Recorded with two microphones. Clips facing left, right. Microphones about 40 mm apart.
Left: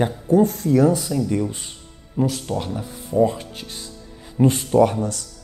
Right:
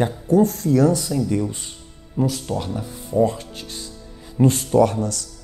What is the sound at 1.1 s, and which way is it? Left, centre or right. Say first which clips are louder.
Speech: even; centre.